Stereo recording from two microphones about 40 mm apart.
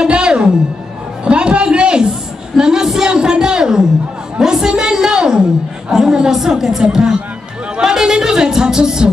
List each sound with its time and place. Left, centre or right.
0.0 s music: right
1.2 s a sound: right
5.9 s music: centre
7.0 s speech: right
7.8 s music: centre